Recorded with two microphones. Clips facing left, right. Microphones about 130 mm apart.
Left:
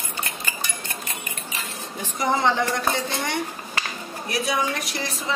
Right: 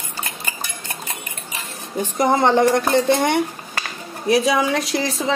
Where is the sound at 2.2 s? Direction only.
50° right (ahead or behind).